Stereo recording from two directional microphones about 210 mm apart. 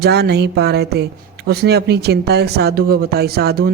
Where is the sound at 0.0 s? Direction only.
50° right (ahead or behind).